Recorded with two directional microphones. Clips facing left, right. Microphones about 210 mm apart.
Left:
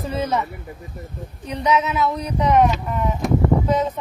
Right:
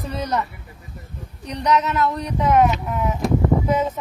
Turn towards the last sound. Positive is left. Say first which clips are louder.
# left 1 dB
turn(degrees=-10)  # may be behind; listen again after turning